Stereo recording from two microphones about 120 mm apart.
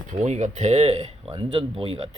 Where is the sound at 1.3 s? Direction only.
45° right (ahead or behind).